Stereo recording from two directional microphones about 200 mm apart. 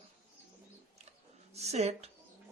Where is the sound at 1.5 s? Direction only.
35° right (ahead or behind).